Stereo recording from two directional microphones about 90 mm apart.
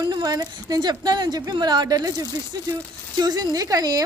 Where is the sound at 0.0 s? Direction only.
50° right (ahead or behind).